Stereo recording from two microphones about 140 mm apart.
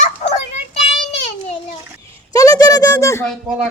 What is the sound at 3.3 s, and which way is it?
Speech, 5° right (ahead or behind).